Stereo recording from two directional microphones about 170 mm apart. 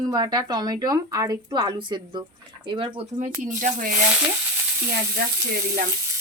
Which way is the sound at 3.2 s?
50° right (ahead or behind).